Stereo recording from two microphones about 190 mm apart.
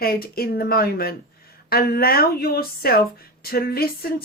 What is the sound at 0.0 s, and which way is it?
A woman's voice, 50° left (ahead or behind).